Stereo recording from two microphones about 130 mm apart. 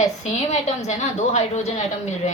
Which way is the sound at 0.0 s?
60° left (ahead or behind).